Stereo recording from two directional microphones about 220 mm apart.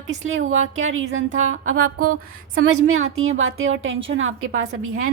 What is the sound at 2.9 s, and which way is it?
A woman's voice, 65° right (ahead or behind).